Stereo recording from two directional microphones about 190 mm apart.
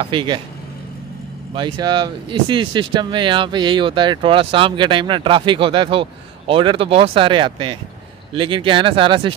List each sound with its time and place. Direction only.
0.0 s speech: 25° right (ahead or behind)
1.5 s speech: 25° right (ahead or behind)